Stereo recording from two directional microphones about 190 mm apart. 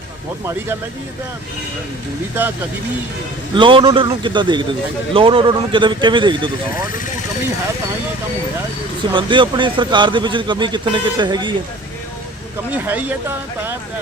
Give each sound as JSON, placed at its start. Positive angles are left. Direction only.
{"t": 3.5, "sound": "speech", "side_deg": -25}
{"t": 9.1, "sound": "speech", "side_deg": -25}
{"t": 12.7, "sound": "speech", "side_deg": -10}